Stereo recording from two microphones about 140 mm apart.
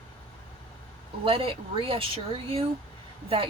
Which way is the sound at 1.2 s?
40° right (ahead or behind).